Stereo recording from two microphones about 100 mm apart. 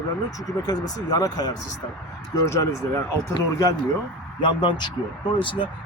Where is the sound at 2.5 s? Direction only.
30° left (ahead or behind).